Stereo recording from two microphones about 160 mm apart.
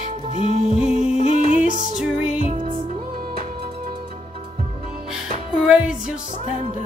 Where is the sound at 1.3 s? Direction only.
50° right (ahead or behind).